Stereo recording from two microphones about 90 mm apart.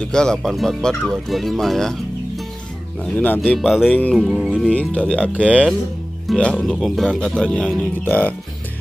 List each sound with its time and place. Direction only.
0.0 s speech: 10° left (ahead or behind)
3.0 s speech: 15° left (ahead or behind)
3.5 s speech: centre (ahead or behind)
3.9 s speech: 10° left (ahead or behind)